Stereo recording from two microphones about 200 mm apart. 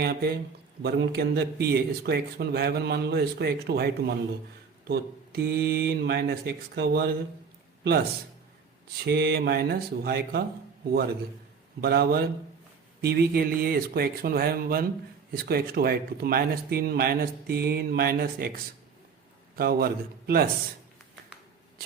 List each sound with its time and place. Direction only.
0.0 s speech: 50° right (ahead or behind)
9.0 s speech: 55° right (ahead or behind)
11.8 s speech: 50° right (ahead or behind)